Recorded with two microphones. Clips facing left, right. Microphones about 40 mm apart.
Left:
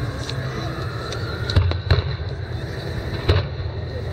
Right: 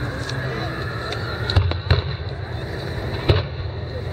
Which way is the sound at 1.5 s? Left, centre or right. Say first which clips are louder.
Left 1 dB; centre.